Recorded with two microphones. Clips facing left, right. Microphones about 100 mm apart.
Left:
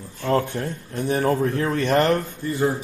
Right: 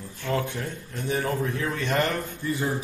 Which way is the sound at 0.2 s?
40° left (ahead or behind).